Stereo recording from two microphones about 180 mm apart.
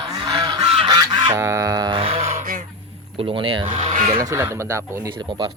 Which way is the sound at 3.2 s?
30° right (ahead or behind).